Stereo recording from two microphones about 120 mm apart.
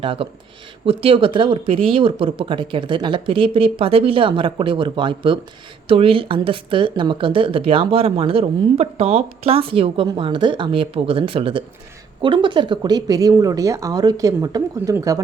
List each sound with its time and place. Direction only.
0.0 s speech: 50° right (ahead or behind); by 15.2 s 30° right (ahead or behind)